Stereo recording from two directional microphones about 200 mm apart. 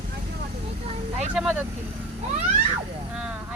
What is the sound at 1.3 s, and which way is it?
Speech, 5° right (ahead or behind).